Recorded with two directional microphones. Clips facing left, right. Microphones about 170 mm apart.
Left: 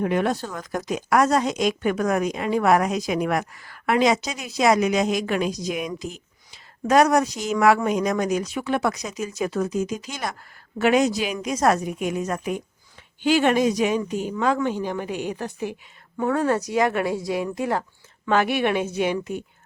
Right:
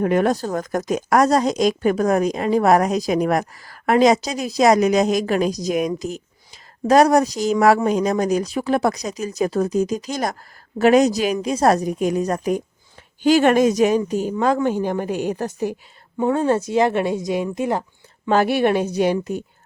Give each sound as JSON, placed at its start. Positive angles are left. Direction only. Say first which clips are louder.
{"t": 0.0, "sound": "a woman's voice", "louder": "right 4 dB", "side_deg": -45}
{"t": 16.1, "sound": "speech", "louder": "right 3 dB", "side_deg": -25}
{"t": 18.3, "sound": "speech", "louder": "right 4 dB", "side_deg": -35}